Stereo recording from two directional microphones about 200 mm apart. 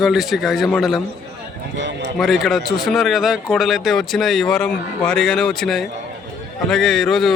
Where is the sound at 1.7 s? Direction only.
65° right (ahead or behind).